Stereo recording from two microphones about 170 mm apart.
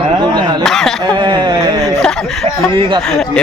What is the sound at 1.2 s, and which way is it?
Speech, 25° right (ahead or behind).